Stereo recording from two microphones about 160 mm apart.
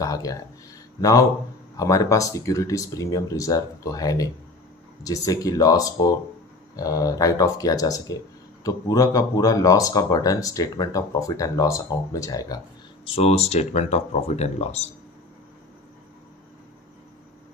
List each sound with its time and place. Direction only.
0.0 s speech: 20° left (ahead or behind)
1.8 s speech: 20° left (ahead or behind)
13.0 s speech: 40° left (ahead or behind)